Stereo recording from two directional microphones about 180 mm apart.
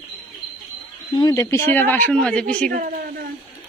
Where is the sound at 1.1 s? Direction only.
20° left (ahead or behind).